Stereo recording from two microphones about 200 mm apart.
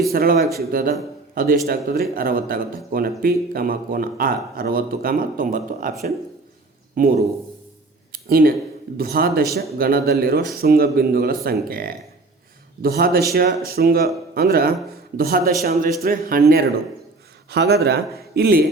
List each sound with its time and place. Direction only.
0.1 s speech: 50° right (ahead or behind)
6.9 s speech: 45° right (ahead or behind)
8.1 s a sound: 50° right (ahead or behind)
9.0 s speech: 50° right (ahead or behind)